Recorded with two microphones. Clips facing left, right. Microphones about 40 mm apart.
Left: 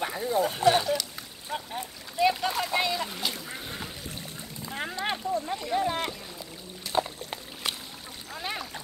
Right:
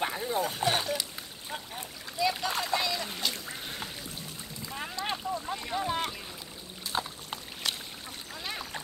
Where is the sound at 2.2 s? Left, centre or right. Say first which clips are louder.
Left 5 dB; left.